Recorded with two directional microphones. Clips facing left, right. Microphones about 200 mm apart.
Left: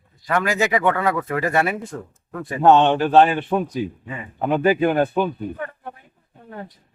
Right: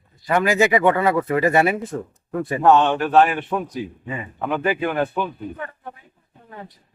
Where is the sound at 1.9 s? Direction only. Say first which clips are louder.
Right 5 dB; 20° right (ahead or behind).